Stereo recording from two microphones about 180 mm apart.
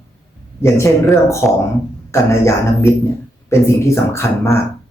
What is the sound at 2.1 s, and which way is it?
Speech, 15° left (ahead or behind).